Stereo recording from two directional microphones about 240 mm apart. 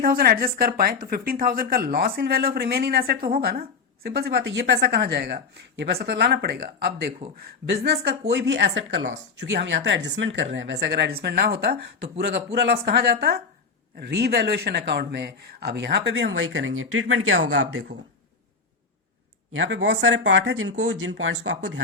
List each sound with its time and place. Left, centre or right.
0.0 s a woman's voice: right
8.3 s a woman's voice: right
19.5 s a woman's voice: right